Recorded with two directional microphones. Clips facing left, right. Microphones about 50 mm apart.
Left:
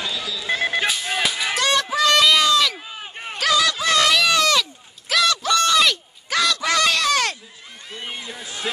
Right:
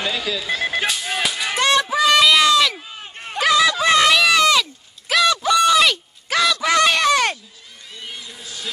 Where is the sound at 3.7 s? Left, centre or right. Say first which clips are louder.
Right 3 dB; right; by 6.7 s centre.